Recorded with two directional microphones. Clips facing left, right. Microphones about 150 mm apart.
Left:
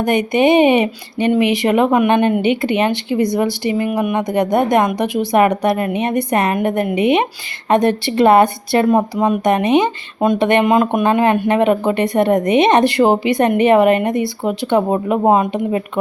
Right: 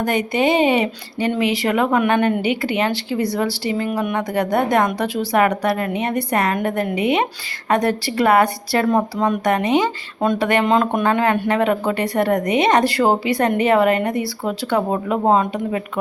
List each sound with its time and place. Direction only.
0.0 s speech: 20° left (ahead or behind)